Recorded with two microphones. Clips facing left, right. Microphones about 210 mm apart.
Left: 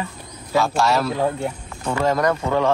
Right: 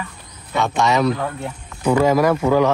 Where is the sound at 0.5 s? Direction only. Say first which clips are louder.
Even; centre (ahead or behind).